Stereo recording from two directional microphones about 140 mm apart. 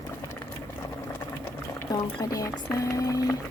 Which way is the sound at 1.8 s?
25° left (ahead or behind).